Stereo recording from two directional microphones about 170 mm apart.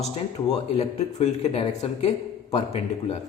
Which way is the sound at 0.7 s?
40° left (ahead or behind).